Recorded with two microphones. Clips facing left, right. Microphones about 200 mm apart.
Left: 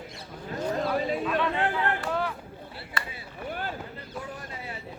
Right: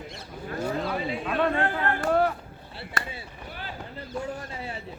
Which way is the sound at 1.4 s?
50° right (ahead or behind).